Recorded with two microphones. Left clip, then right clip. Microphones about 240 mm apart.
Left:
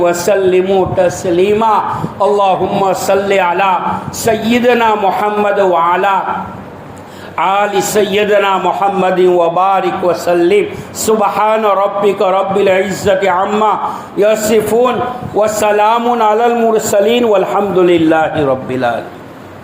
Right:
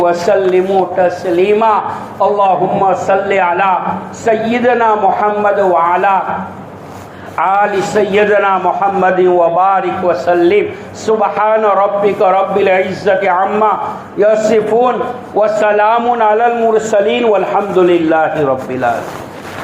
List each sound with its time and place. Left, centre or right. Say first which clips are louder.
0.0 s a man's voice: even; left
7.3 s a man's voice: even; left